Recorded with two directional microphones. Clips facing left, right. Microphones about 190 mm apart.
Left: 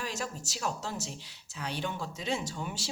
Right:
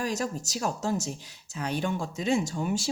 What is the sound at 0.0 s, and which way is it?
A woman's voice, 45° right (ahead or behind).